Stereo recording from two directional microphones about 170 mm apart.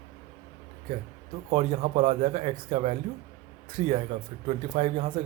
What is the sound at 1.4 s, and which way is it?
Speech, 35° right (ahead or behind).